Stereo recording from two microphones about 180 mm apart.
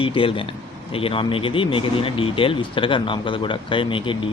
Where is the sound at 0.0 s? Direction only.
30° left (ahead or behind).